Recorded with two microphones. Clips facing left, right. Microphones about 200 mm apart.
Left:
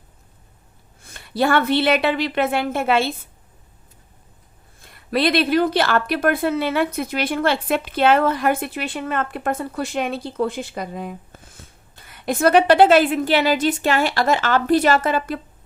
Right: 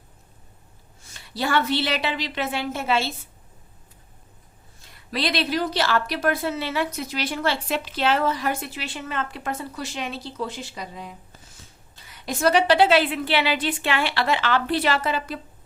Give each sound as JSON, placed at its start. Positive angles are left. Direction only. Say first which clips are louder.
{"t": 1.0, "sound": "a woman's voice", "louder": "left 7 dB", "side_deg": 55}
{"t": 4.8, "sound": "speech", "louder": "left 7 dB", "side_deg": 55}